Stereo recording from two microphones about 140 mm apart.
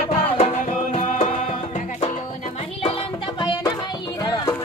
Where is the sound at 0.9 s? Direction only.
55° left (ahead or behind).